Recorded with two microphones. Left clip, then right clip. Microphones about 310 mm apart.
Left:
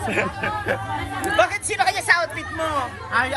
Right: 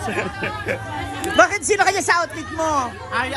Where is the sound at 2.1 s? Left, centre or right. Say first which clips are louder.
Right 1 dB; centre.